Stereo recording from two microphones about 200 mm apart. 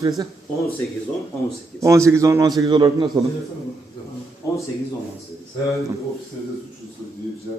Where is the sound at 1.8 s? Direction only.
15° right (ahead or behind).